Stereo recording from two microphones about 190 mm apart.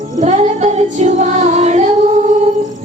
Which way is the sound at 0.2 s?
35° right (ahead or behind).